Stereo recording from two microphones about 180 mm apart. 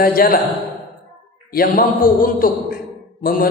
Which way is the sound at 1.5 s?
50° left (ahead or behind).